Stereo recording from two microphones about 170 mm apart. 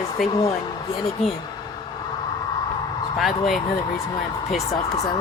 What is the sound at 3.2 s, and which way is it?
Speech, centre (ahead or behind).